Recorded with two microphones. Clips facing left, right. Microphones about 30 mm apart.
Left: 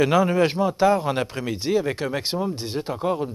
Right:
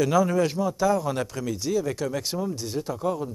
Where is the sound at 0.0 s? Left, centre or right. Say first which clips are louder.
Left 3 dB; left.